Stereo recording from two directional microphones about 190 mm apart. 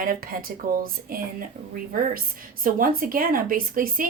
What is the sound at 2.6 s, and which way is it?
Speech, 45° right (ahead or behind).